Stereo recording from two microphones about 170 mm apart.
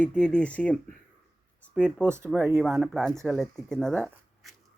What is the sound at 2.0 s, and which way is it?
Speech, 15° right (ahead or behind).